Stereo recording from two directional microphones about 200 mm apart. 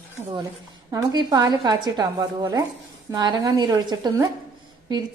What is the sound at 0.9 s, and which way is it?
A woman's voice, 20° right (ahead or behind).